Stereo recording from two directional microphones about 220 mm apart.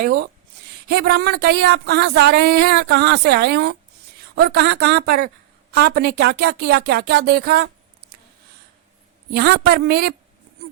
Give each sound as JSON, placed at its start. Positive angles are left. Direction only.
{"t": 0.0, "sound": "speech", "side_deg": -45}
{"t": 9.3, "sound": "speech", "side_deg": -45}